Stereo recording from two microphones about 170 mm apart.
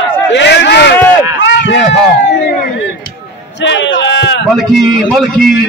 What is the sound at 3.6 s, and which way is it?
Speech, 90° left.